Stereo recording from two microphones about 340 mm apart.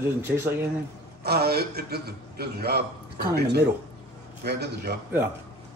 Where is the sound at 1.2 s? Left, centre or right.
Right.